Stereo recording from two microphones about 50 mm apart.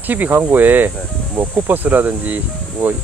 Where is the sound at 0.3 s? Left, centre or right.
Right.